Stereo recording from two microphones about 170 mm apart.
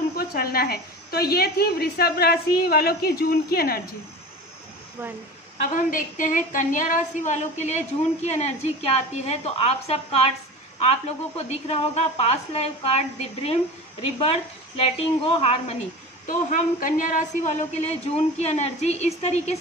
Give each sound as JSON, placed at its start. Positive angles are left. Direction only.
{"t": 0.1, "sound": "a woman's voice", "side_deg": 65}
{"t": 5.9, "sound": "a woman's voice", "side_deg": 50}
{"t": 16.3, "sound": "a woman's voice", "side_deg": 50}